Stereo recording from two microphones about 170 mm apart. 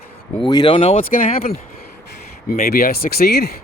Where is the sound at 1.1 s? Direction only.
60° left (ahead or behind).